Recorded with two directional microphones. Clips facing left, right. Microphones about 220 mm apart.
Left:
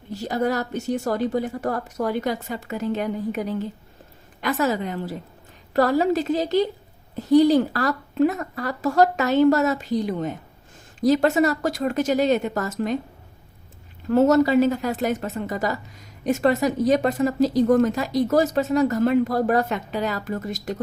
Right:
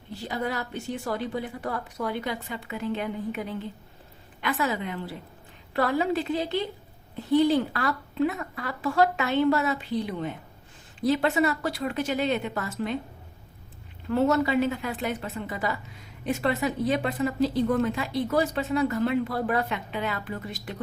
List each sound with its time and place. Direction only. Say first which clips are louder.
0.1 s a woman's voice: left 7 dB; 45° left (ahead or behind)
14.1 s a woman's voice: left 6 dB; 40° left (ahead or behind)